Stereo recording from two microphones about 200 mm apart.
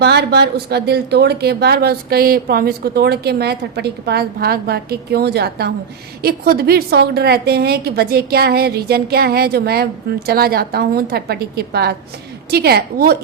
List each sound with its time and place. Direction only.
0.0 s speech: 55° right (ahead or behind)